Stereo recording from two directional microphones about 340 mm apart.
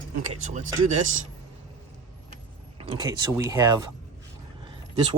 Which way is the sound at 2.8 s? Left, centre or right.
Centre.